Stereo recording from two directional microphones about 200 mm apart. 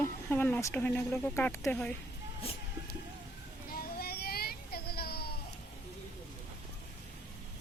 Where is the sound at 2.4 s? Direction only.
30° left (ahead or behind).